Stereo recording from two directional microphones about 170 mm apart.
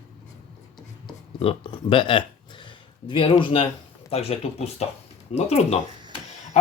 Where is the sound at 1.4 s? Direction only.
30° left (ahead or behind).